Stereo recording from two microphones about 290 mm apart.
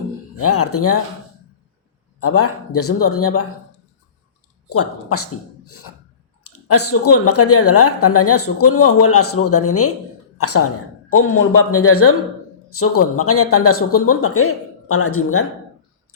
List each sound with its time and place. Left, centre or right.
0.3 s a man's voice: left
2.2 s a man's voice: left
4.7 s a man's voice: left